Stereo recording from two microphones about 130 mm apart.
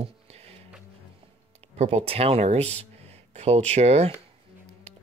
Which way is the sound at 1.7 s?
50° right (ahead or behind).